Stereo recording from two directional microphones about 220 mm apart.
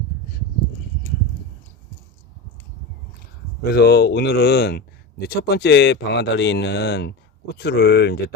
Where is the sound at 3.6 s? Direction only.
45° left (ahead or behind).